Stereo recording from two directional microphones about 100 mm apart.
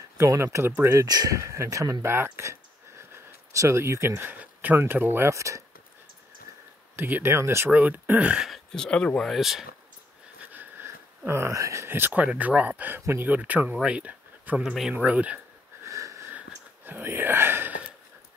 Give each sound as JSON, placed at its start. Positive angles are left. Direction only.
{"t": 0.2, "sound": "speech", "side_deg": -30}
{"t": 1.0, "sound": "speech", "side_deg": -40}
{"t": 4.2, "sound": "speech", "side_deg": -15}
{"t": 7.0, "sound": "speech", "side_deg": -20}
{"t": 8.5, "sound": "speech", "side_deg": 5}
{"t": 10.4, "sound": "speech", "side_deg": -20}
{"t": 14.6, "sound": "speech", "side_deg": -5}
{"t": 15.8, "sound": "sniff", "side_deg": -30}
{"t": 16.3, "sound": "whispering", "side_deg": -15}